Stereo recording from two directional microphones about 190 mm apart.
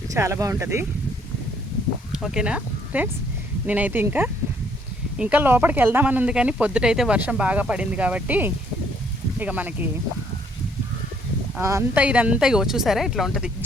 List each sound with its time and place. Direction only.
0.1 s speech: 15° right (ahead or behind)
2.1 s speech: 5° right (ahead or behind)
11.6 s speech: 15° right (ahead or behind)